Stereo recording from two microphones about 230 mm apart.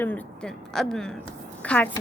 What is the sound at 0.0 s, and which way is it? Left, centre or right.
Speech, centre.